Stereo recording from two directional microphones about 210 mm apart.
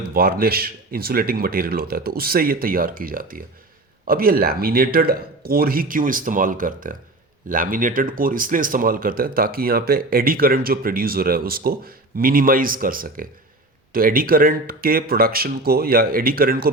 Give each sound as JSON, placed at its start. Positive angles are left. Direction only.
{"t": 0.1, "sound": "speech", "side_deg": -45}